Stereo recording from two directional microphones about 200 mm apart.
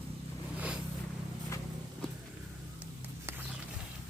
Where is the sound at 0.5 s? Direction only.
5° right (ahead or behind).